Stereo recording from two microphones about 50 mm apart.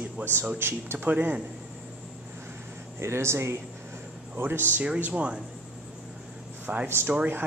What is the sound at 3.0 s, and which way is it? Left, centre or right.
Speech, right.